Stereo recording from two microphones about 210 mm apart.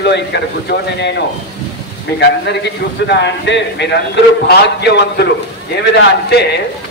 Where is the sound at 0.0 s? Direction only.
55° left (ahead or behind).